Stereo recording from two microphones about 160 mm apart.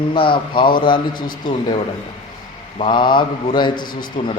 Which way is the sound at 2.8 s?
30° left (ahead or behind).